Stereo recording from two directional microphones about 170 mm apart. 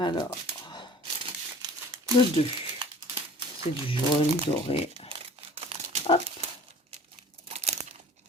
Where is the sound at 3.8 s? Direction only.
35° left (ahead or behind).